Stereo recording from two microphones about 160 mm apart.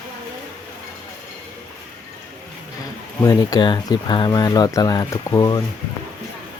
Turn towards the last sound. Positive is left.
turn(degrees=20)  # may be behind; listen again after turning